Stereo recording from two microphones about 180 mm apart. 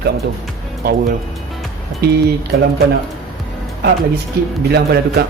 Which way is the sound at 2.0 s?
60° right (ahead or behind).